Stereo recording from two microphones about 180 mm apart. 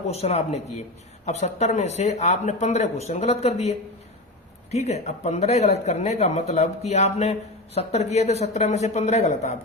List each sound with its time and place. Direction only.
0.1 s speech: 35° left (ahead or behind)